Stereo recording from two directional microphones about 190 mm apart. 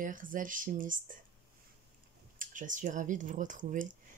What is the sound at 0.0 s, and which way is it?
Speech, 45° right (ahead or behind).